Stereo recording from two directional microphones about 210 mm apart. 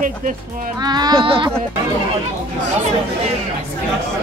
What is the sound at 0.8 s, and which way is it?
Speech, 20° right (ahead or behind).